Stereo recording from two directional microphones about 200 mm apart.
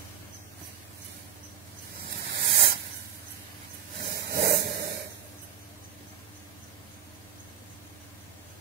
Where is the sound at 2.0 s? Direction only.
50° right (ahead or behind).